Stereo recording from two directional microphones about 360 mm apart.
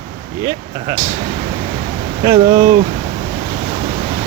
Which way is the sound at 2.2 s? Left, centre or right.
Centre.